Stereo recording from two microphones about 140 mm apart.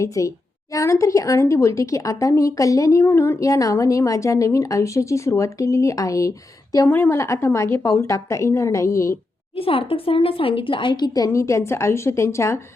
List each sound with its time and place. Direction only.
0.0 s a woman's voice: 25° left (ahead or behind)
9.6 s a woman's voice: 40° left (ahead or behind); by 12.5 s 20° left (ahead or behind)